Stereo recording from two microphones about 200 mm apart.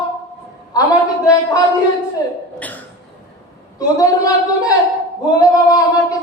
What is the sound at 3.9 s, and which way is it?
Singing, 20° left (ahead or behind).